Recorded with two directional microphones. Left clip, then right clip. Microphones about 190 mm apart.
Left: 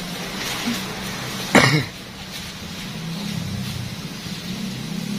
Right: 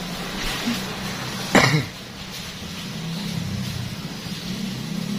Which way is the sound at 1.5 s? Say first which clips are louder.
Left 2 dB; 30° left (ahead or behind).